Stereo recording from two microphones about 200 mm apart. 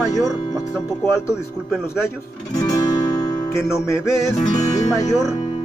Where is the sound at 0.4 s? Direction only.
15° left (ahead or behind).